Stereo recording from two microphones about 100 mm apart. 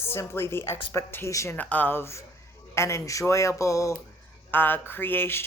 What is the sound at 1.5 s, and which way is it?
A woman's voice, 15° left (ahead or behind).